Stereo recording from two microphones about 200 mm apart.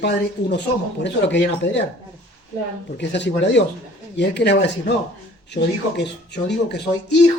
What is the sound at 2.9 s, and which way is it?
Speech, 60° left (ahead or behind).